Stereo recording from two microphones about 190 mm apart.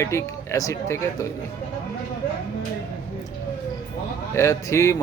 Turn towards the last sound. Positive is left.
turn(degrees=15)  # may be behind; listen again after turning